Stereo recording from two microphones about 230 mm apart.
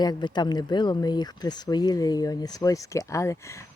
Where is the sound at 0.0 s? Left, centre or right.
Centre.